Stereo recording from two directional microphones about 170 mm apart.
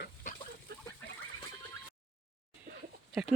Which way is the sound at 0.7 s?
70° right (ahead or behind).